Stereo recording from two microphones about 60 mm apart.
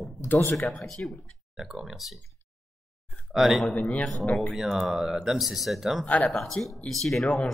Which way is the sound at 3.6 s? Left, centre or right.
Left.